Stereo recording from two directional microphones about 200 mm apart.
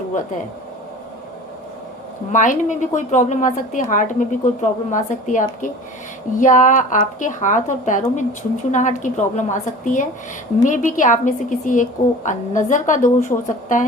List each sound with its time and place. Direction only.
2.3 s speech: 40° left (ahead or behind)